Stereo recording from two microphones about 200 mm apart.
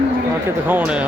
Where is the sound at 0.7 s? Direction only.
5° right (ahead or behind).